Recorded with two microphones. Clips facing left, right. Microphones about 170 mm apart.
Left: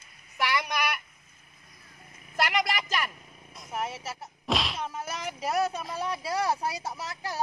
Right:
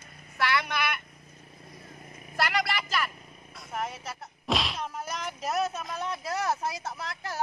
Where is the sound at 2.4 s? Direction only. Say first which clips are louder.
Left 1 dB; 15° left (ahead or behind).